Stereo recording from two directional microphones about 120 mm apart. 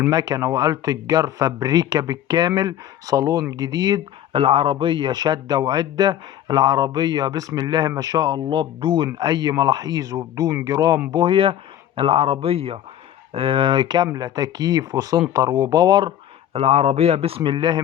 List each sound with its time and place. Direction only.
0.1 s a man's voice: 30° right (ahead or behind)
4.3 s a man's voice: 50° right (ahead or behind)
9.1 s a man's voice: 30° right (ahead or behind)
16.5 s a man's voice: 55° right (ahead or behind); by 17.7 s 40° right (ahead or behind)